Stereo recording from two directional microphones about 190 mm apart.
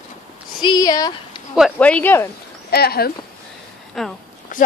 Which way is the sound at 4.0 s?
Centre (ahead or behind).